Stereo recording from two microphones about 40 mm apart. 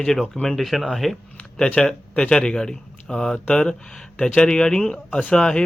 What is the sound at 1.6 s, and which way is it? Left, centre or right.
Speech, left.